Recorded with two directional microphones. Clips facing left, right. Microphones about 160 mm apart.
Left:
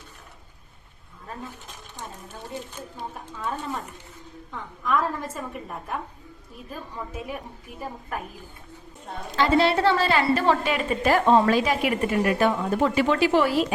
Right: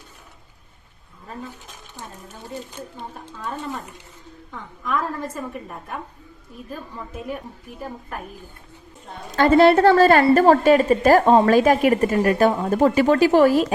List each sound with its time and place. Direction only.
3.0 s a woman's voice: 5° left (ahead or behind)
9.3 s a woman's voice: 50° right (ahead or behind)